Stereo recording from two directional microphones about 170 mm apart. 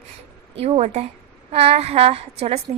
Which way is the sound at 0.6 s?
40° right (ahead or behind).